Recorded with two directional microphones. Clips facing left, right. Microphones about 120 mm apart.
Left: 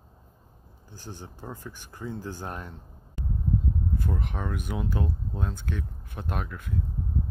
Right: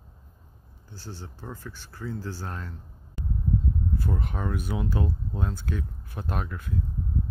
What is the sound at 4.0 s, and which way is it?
Speech, 5° right (ahead or behind).